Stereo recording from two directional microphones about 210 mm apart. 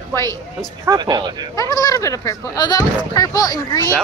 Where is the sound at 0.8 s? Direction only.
20° right (ahead or behind).